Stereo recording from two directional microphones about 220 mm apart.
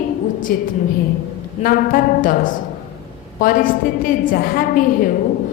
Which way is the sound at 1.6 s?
40° left (ahead or behind).